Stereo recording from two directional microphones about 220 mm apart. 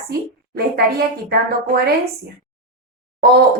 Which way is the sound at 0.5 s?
45° right (ahead or behind).